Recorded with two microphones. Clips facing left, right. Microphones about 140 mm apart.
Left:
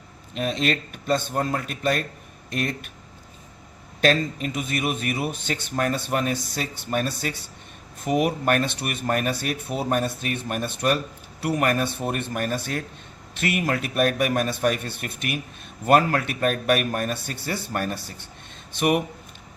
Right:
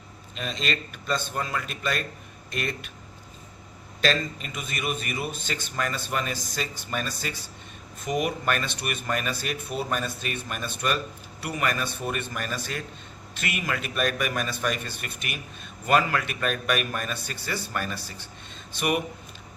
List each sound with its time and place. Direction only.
0.3 s a man's voice: 50° left (ahead or behind)
4.0 s a man's voice: 50° left (ahead or behind)